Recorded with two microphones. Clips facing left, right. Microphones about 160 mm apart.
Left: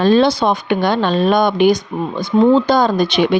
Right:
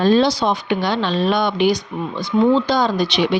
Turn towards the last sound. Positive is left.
turn(degrees=50)  # may be behind; listen again after turning